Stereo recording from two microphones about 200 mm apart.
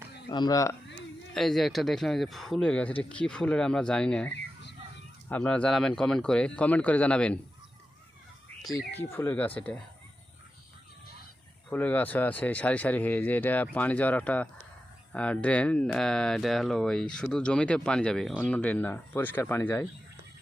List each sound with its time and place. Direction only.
0.3 s speech: 20° left (ahead or behind)
1.3 s speech: centre (ahead or behind)
8.9 s speech: 10° left (ahead or behind)
11.7 s speech: 10° left (ahead or behind)